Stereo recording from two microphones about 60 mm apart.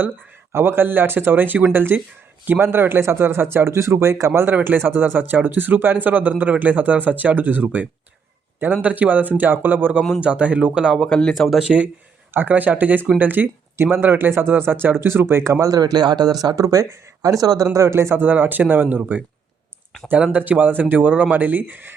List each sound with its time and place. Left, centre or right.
0.5 s speech: right
4.3 s speech: right
10.2 s speech: right
10.9 s speech: centre
11.3 s speech: centre
12.3 s speech: right
15.6 s speech: right
17.8 s speech: right
18.2 s speech: right
20.1 s speech: centre
20.4 s speech: right